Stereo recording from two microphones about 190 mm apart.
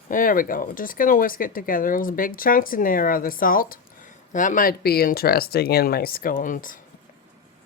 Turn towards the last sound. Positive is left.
turn(degrees=45)  # may be behind; listen again after turning